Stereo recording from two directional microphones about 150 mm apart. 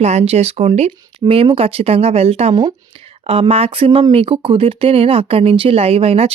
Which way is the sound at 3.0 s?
40° right (ahead or behind).